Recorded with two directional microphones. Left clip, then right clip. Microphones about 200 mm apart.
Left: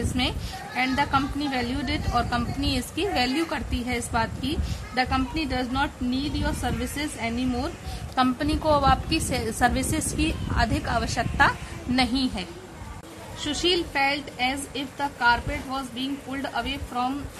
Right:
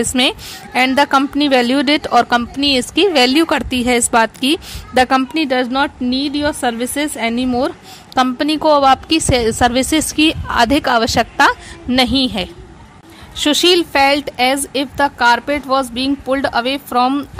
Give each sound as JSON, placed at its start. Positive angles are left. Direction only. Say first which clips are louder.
{"t": 0.1, "sound": "a woman's voice", "louder": "right 12 dB", "side_deg": -50}
{"t": 13.4, "sound": "a woman's voice", "louder": "right 13 dB", "side_deg": -50}